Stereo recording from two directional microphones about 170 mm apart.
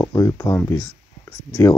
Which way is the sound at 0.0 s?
20° left (ahead or behind).